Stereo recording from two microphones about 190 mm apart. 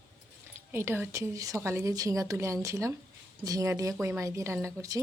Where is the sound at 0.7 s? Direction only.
10° right (ahead or behind).